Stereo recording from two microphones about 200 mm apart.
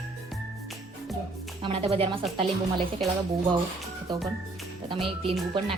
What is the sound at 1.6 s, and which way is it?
Speech, 30° right (ahead or behind).